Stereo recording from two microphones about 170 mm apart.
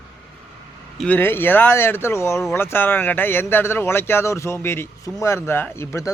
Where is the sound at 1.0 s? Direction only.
10° left (ahead or behind).